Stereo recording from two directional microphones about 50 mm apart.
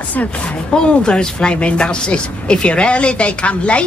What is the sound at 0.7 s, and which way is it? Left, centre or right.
A woman's voice, centre.